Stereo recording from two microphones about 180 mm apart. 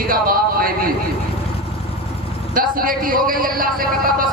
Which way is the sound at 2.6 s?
50° right (ahead or behind).